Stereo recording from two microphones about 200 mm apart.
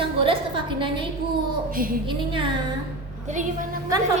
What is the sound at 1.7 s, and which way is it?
Speech, 45° right (ahead or behind).